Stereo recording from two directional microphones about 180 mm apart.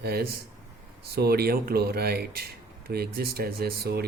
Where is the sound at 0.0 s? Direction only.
60° right (ahead or behind).